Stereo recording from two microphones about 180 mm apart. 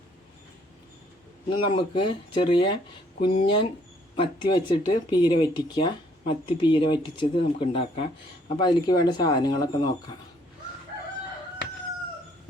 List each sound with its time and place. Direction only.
1.5 s speech: 30° left (ahead or behind)